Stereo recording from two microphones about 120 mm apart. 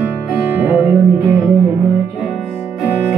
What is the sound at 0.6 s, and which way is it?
Music, 15° right (ahead or behind).